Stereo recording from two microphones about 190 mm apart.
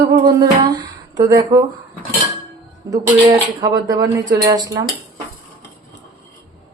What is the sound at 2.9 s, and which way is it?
Speech, 20° right (ahead or behind).